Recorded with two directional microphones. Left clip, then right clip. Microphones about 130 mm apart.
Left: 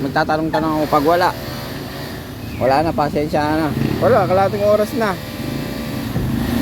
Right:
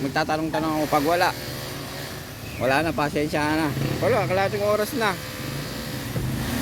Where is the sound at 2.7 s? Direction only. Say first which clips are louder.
Left 6 dB; 20° right (ahead or behind).